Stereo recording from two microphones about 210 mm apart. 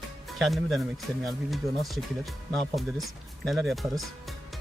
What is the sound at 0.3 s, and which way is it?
Speech, centre (ahead or behind).